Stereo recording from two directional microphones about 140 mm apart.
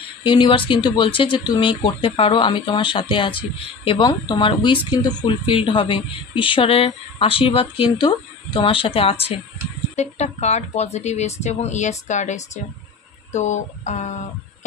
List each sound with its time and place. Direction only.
0.2 s a woman's voice: 35° left (ahead or behind)
9.9 s speech: 55° left (ahead or behind)
13.3 s a sound: 55° left (ahead or behind)